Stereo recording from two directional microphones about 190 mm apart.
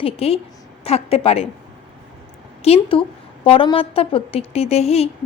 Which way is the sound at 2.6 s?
30° left (ahead or behind).